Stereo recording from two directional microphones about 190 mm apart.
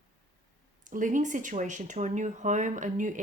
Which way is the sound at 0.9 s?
40° right (ahead or behind).